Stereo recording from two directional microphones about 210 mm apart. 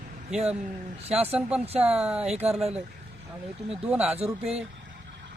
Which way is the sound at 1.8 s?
5° right (ahead or behind).